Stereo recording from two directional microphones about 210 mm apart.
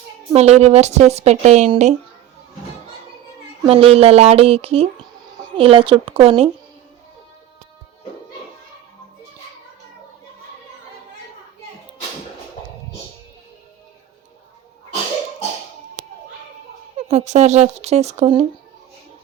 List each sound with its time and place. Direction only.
0.3 s a woman's voice: 30° right (ahead or behind)
3.6 s speech: 25° right (ahead or behind)
17.1 s a woman's voice: 30° right (ahead or behind)